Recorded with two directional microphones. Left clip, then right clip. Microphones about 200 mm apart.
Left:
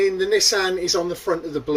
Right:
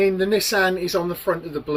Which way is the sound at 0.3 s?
45° right (ahead or behind).